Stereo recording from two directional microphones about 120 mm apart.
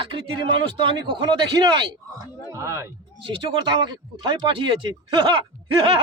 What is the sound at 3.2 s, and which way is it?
Speech, 40° right (ahead or behind).